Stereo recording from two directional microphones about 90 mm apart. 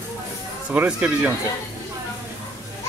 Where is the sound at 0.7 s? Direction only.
15° right (ahead or behind).